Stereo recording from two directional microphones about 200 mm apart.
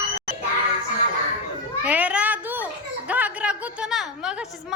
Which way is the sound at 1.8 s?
5° right (ahead or behind).